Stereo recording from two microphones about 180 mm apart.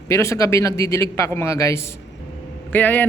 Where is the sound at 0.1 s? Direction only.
15° left (ahead or behind).